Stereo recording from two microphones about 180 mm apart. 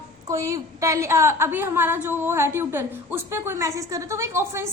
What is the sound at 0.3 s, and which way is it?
A woman's voice, 20° right (ahead or behind).